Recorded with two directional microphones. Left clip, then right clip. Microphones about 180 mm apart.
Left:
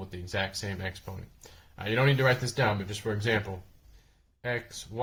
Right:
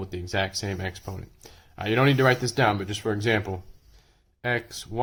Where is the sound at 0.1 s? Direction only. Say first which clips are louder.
Right 4 dB; 40° right (ahead or behind).